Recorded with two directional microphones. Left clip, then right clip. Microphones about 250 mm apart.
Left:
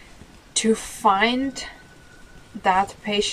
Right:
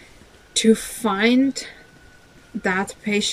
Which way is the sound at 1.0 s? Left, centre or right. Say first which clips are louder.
Left 2 dB; left.